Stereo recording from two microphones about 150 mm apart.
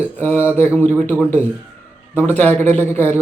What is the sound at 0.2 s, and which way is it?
Speech, 10° left (ahead or behind).